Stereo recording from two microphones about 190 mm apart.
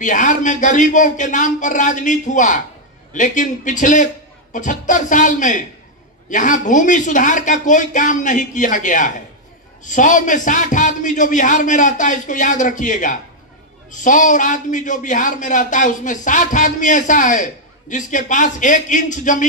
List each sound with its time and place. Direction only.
0.0 s a man's voice: 40° left (ahead or behind)